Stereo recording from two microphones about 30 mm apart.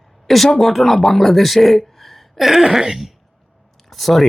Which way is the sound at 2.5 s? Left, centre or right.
Centre.